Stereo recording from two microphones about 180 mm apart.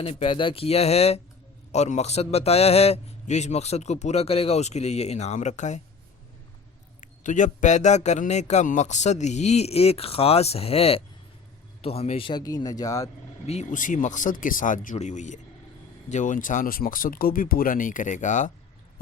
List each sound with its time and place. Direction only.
0.0 s a man's voice: 30° left (ahead or behind)
7.0 s a man's voice: 45° left (ahead or behind); by 13.1 s 20° left (ahead or behind)
13.5 s speech: 40° left (ahead or behind)